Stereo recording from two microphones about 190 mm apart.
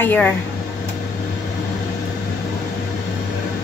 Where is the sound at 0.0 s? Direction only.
10° left (ahead or behind).